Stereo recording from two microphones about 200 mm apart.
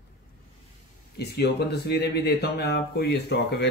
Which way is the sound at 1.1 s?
55° left (ahead or behind).